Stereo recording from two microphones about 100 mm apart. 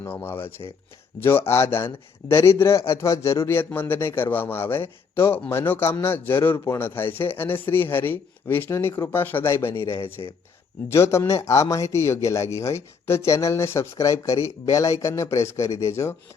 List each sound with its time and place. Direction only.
0.0 s speech: 20° left (ahead or behind)
10.2 s speech: 40° left (ahead or behind)
10.8 s speech: 25° left (ahead or behind)